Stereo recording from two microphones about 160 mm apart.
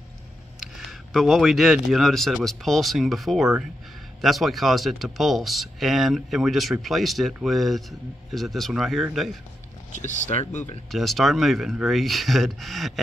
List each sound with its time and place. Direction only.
0.7 s speech: centre (ahead or behind)
9.9 s speech: 50° left (ahead or behind)
10.9 s speech: centre (ahead or behind)